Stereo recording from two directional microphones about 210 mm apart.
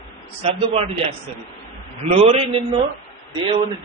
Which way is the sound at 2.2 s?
30° right (ahead or behind).